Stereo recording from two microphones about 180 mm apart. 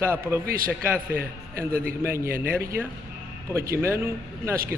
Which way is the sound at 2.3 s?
55° right (ahead or behind).